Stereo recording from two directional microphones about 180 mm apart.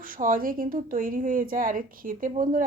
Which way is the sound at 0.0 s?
50° right (ahead or behind).